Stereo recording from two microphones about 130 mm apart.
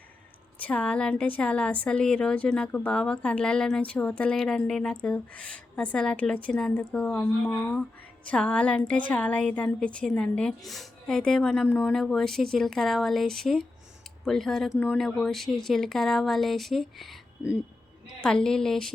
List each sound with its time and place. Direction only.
0.6 s a woman's voice: 10° left (ahead or behind)